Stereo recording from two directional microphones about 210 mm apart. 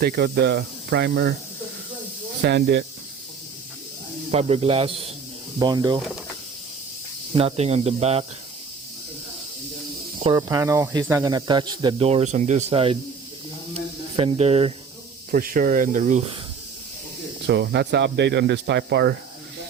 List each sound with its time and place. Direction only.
0.0 s speech: 50° right (ahead or behind)
2.4 s speech: 55° right (ahead or behind)
4.3 s speech: 30° right (ahead or behind)
7.3 s speech: 30° right (ahead or behind)
10.2 s speech: 20° right (ahead or behind)
13.7 s snake: 25° right (ahead or behind)
15.3 s speech: 40° right (ahead or behind)
17.4 s speech: 55° right (ahead or behind)